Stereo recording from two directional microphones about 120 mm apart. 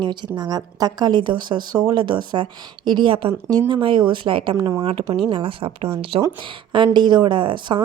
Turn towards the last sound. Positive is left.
turn(degrees=-40)  # may be behind; listen again after turning